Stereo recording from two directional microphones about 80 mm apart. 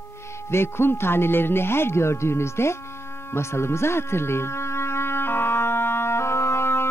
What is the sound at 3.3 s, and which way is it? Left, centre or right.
Music, left.